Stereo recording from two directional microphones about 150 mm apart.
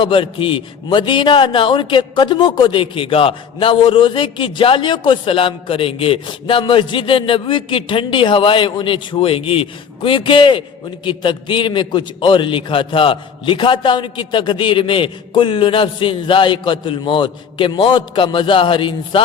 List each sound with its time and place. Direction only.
0.0 s a man's voice: 35° left (ahead or behind)